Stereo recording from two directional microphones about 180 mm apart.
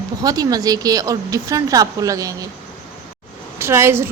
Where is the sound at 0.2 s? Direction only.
20° right (ahead or behind).